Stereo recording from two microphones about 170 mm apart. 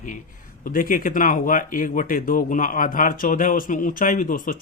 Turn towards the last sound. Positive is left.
turn(degrees=55)  # may be behind; listen again after turning